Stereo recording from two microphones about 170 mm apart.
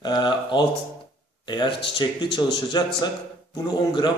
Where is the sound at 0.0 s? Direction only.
25° left (ahead or behind).